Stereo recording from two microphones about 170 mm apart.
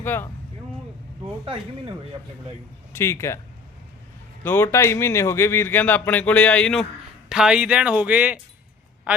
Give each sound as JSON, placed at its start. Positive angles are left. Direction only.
{"t": 0.0, "sound": "speech", "side_deg": 10}
{"t": 2.9, "sound": "speech", "side_deg": 15}
{"t": 4.4, "sound": "speech", "side_deg": 15}